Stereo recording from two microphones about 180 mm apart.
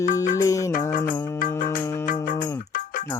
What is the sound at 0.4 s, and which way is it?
Music, 20° left (ahead or behind).